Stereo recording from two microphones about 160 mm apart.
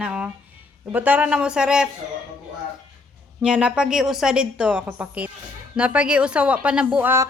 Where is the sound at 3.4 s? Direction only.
5° right (ahead or behind).